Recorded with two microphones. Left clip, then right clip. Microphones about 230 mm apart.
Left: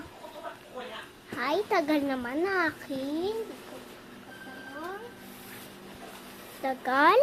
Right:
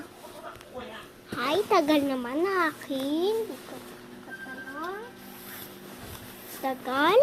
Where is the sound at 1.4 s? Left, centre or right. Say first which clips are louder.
Right 2 dB; centre.